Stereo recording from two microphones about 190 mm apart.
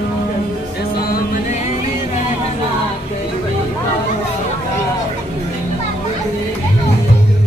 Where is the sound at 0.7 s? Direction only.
50° left (ahead or behind).